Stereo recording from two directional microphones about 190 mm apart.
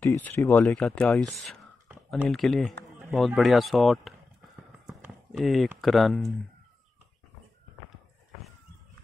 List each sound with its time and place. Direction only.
0.0 s speech: 10° left (ahead or behind)
4.8 s a sound: centre (ahead or behind)
5.7 s speech: centre (ahead or behind)